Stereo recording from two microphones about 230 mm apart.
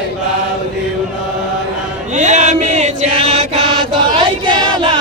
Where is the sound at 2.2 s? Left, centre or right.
Right.